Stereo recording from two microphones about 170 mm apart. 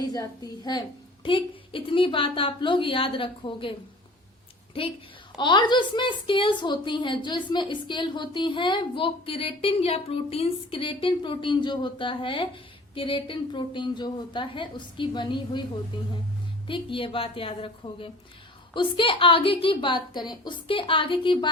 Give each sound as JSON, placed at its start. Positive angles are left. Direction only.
{"t": 0.1, "sound": "a woman's voice", "side_deg": 20}
{"t": 5.4, "sound": "a woman's voice", "side_deg": 25}